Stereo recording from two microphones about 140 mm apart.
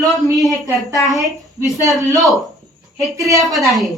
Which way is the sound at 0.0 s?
25° right (ahead or behind).